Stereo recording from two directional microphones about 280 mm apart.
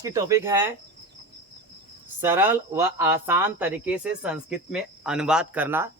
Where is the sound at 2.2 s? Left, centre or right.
Centre.